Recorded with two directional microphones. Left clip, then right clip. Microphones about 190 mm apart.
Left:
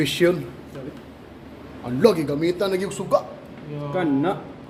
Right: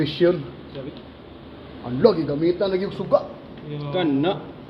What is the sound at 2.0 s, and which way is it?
Speech, 20° left (ahead or behind).